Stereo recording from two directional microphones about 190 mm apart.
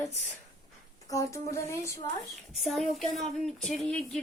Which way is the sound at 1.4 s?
15° left (ahead or behind).